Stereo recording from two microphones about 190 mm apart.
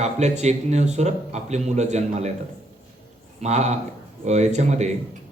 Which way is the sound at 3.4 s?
35° right (ahead or behind).